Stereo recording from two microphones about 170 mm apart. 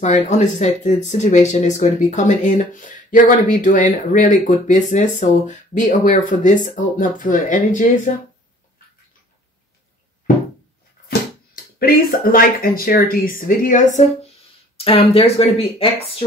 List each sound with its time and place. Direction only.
0.0 s speech: 45° left (ahead or behind)
11.1 s speech: 60° left (ahead or behind)
14.8 s speech: 35° left (ahead or behind)